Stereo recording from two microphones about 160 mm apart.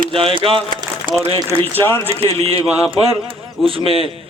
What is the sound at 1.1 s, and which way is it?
Speech, 60° right (ahead or behind).